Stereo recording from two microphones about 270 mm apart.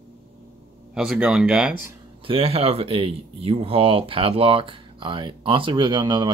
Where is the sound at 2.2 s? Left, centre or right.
Right.